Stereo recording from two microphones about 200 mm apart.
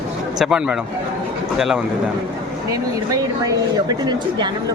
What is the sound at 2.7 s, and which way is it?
Speech, 15° right (ahead or behind).